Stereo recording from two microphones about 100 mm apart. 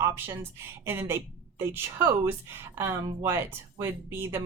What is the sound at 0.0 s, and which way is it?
Speech, 25° right (ahead or behind).